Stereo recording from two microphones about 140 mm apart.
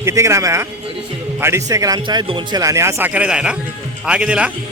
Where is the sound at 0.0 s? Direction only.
20° right (ahead or behind).